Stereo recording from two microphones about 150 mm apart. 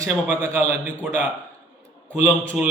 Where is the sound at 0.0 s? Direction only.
20° right (ahead or behind).